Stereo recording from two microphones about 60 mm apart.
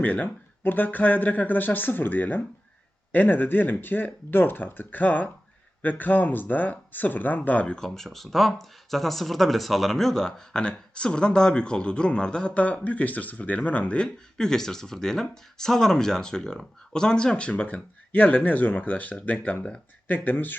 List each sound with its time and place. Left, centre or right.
0.0 s speech: left
7.8 s speech: centre; by 20.6 s left